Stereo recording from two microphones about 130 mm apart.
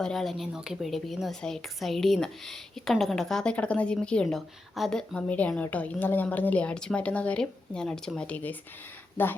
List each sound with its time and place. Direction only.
0.0 s a woman's voice: 5° left (ahead or behind)